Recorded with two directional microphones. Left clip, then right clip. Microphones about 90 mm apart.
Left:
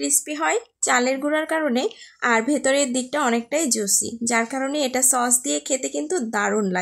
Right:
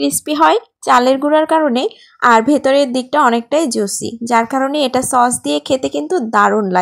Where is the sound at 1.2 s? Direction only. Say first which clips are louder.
Right 10 dB; 30° right (ahead or behind).